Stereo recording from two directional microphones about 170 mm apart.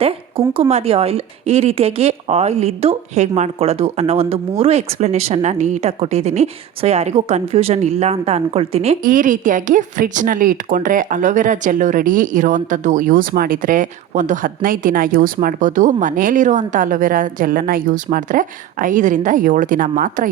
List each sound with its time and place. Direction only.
0.0 s a woman's voice: 35° right (ahead or behind)
9.0 s a woman's voice: 50° right (ahead or behind)